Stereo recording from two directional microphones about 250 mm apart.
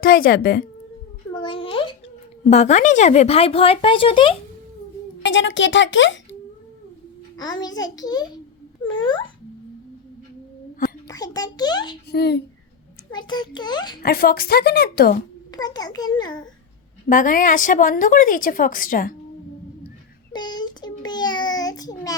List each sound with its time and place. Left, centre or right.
0.0 s a woman's voice: left
1.4 s a sound: left
2.5 s speech: left
5.2 s speech: left
7.3 s a child's voice: centre
11.1 s a child's voice: centre
12.1 s a woman's voice: left
13.1 s a child's voice: centre
14.0 s a woman's voice: left
15.5 s a child's voice: centre
17.1 s a woman's voice: left
20.3 s child singing: centre